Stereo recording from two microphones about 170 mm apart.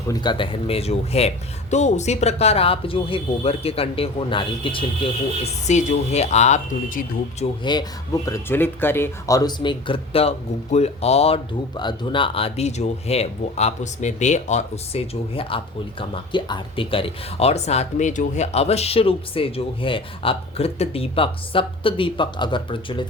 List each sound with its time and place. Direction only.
0.1 s speech: 25° left (ahead or behind)
5.6 s speech: 45° left (ahead or behind)
7.6 s speech: 25° left (ahead or behind)
11.8 s speech: 30° left (ahead or behind)